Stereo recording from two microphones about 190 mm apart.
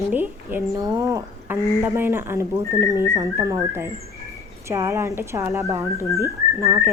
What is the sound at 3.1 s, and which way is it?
Speech, 15° right (ahead or behind).